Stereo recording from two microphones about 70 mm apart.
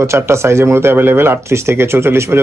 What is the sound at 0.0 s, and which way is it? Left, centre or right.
A man's voice, right.